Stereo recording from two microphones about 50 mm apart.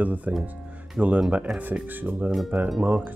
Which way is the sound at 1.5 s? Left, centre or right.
Centre.